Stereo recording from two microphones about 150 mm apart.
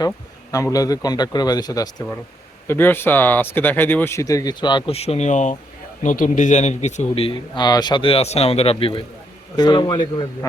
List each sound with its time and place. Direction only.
0.5 s a man's voice: 25° left (ahead or behind)
2.6 s speech: 15° left (ahead or behind); by 4.9 s 30° left (ahead or behind)
4.9 s a man's voice: 45° left (ahead or behind); by 10.2 s 30° left (ahead or behind)